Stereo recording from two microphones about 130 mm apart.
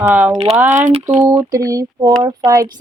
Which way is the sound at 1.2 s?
25° right (ahead or behind).